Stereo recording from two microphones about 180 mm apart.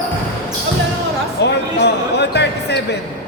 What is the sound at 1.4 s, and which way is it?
Speech, 70° left (ahead or behind).